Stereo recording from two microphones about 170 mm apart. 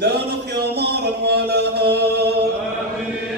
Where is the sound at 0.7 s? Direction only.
75° right (ahead or behind).